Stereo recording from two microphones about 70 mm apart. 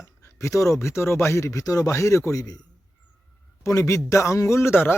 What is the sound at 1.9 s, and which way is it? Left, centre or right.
Speech, left.